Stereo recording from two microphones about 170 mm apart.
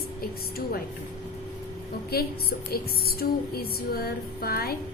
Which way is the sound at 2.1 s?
65° left (ahead or behind).